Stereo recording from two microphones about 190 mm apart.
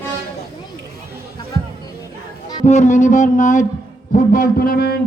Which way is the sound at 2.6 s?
35° left (ahead or behind).